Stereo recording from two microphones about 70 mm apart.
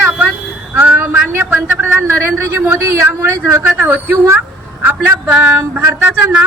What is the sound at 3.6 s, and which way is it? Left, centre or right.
A woman's voice, right.